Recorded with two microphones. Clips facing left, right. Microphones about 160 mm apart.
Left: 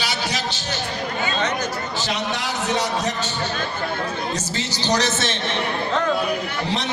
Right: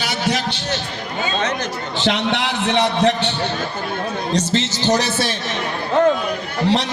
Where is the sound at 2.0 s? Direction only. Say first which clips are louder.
Right 9 dB; 70° right (ahead or behind).